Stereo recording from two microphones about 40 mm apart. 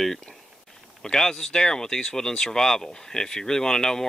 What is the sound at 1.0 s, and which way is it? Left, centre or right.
Speech, centre.